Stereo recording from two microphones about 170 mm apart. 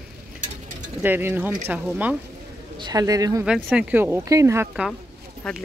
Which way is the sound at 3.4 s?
5° right (ahead or behind).